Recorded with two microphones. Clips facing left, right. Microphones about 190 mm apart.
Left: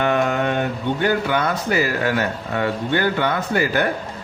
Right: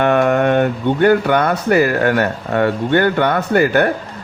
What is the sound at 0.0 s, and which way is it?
Speech, 60° right (ahead or behind).